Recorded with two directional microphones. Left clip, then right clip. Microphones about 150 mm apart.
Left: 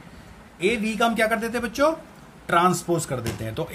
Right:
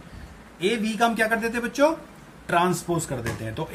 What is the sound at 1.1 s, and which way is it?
A man's voice, 30° left (ahead or behind).